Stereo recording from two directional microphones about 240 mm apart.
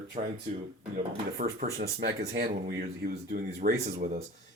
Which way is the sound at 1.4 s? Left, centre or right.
Right.